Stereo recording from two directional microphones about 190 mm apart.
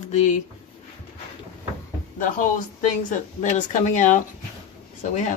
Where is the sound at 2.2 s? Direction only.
45° left (ahead or behind).